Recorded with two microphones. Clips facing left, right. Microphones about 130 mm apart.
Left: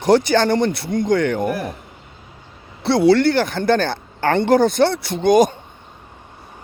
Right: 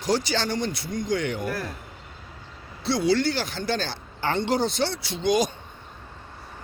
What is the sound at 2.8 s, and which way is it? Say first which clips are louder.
Speech: left 9 dB; 60° left (ahead or behind).